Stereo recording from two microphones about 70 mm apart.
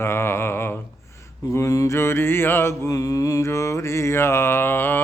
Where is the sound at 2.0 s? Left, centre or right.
Left.